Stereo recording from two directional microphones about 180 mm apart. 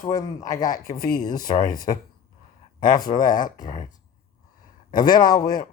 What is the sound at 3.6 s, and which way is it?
A man's voice, 20° left (ahead or behind).